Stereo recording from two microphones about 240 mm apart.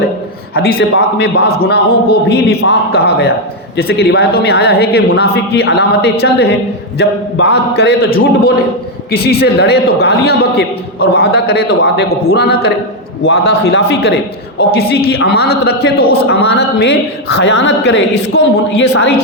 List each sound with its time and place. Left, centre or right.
0.5 s a man's voice: left